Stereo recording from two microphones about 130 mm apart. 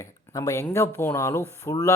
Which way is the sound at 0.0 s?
25° left (ahead or behind).